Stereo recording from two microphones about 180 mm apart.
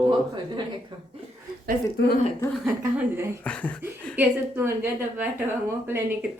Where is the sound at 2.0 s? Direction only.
70° left (ahead or behind).